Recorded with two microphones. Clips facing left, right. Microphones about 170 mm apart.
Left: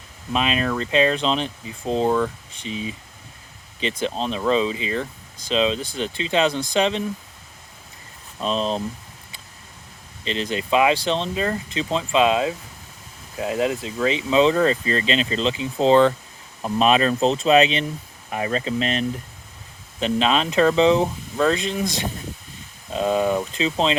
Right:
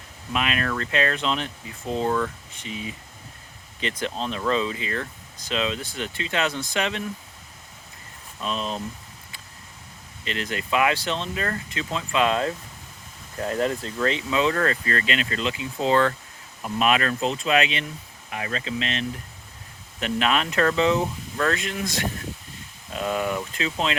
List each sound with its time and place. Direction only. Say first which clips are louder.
0.3 s speech: left 4 dB; 25° left (ahead or behind)
4.0 s speech: left 4 dB; 20° left (ahead or behind)
8.4 s speech: left 6 dB; 30° left (ahead or behind)
10.2 s speech: left 5 dB; 25° left (ahead or behind)
14.2 s speech: left 9 dB; 25° left (ahead or behind); by 19.0 s 40° left (ahead or behind)
20.0 s speech: left 3 dB; 25° left (ahead or behind)